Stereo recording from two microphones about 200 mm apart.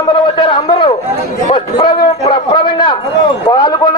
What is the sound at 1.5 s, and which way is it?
A man's voice, 25° left (ahead or behind).